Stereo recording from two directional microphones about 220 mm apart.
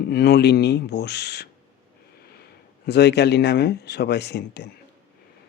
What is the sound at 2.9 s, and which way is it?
Speech, 50° left (ahead or behind).